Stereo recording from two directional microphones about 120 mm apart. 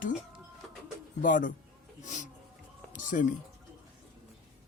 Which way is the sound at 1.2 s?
90° left.